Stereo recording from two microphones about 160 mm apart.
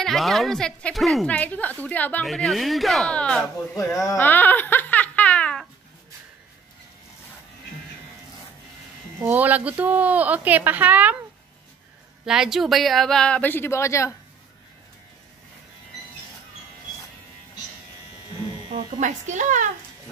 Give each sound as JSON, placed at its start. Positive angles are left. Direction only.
{"t": 0.0, "sound": "a woman's voice", "side_deg": 0}
{"t": 3.7, "sound": "giggle", "side_deg": 20}
{"t": 9.2, "sound": "speech", "side_deg": -10}
{"t": 12.3, "sound": "a woman's voice", "side_deg": -5}
{"t": 18.9, "sound": "speech", "side_deg": -50}